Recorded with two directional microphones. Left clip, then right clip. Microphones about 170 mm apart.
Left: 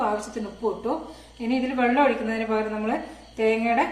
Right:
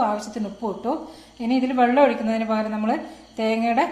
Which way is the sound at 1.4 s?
50° right (ahead or behind).